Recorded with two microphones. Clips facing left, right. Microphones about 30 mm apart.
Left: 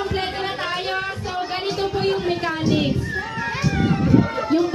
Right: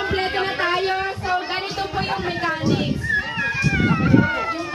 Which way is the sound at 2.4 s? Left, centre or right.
Centre.